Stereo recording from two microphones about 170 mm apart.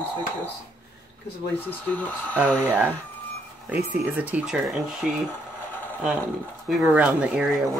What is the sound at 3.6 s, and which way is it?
Speech, 10° right (ahead or behind).